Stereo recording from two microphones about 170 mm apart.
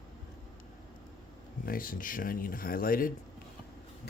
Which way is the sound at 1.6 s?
55° left (ahead or behind).